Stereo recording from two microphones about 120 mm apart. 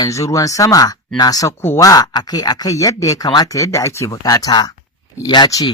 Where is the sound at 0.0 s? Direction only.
25° left (ahead or behind).